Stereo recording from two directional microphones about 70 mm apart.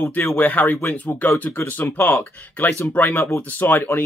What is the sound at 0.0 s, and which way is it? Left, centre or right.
Speech, left.